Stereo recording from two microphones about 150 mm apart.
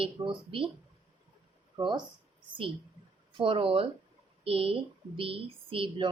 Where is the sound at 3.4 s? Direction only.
35° right (ahead or behind).